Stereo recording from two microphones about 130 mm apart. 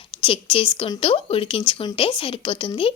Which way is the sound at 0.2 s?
45° left (ahead or behind).